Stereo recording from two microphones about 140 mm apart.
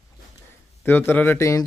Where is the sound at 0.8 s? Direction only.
15° left (ahead or behind).